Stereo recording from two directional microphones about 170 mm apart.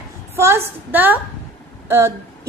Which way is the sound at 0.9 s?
10° right (ahead or behind).